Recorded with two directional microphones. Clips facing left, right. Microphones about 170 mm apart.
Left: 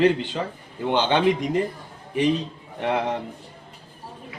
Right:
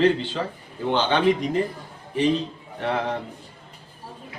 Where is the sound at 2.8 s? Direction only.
15° left (ahead or behind).